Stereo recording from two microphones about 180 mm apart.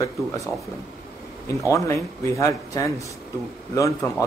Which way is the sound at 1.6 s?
15° left (ahead or behind).